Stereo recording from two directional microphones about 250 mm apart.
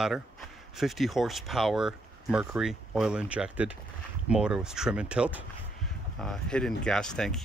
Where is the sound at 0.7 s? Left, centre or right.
Centre.